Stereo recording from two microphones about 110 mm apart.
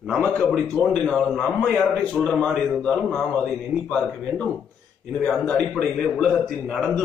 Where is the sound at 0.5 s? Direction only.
Centre (ahead or behind).